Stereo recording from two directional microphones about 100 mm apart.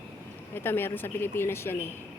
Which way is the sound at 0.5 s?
20° left (ahead or behind).